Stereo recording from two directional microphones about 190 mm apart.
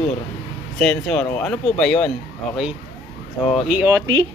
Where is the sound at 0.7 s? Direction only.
5° left (ahead or behind).